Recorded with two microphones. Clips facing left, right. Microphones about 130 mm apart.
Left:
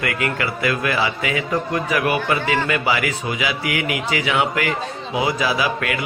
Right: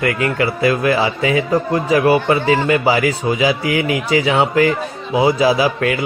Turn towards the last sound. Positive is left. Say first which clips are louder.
# right 6 dB
turn(degrees=-30)  # may be behind; listen again after turning